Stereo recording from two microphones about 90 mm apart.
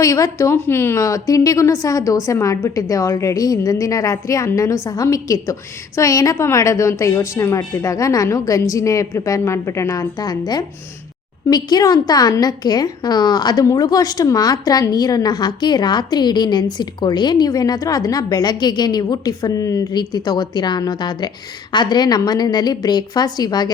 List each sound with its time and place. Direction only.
0.0 s a woman's voice: 35° left (ahead or behind)
1.0 s a woman's voice: 40° left (ahead or behind)